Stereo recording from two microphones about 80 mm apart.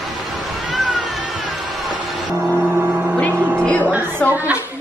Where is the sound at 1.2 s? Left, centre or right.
Centre.